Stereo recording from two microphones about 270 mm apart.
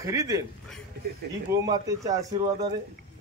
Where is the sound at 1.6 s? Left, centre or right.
Centre.